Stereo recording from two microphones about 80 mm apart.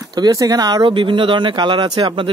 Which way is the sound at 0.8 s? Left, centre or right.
Right.